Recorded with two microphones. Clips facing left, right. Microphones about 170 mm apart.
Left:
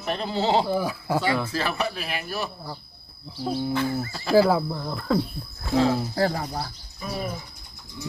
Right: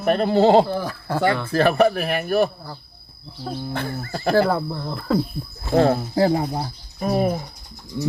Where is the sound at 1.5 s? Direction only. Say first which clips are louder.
Right 10 dB; 55° right (ahead or behind).